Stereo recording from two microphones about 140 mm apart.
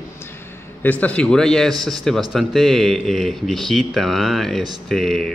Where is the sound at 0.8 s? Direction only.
10° left (ahead or behind).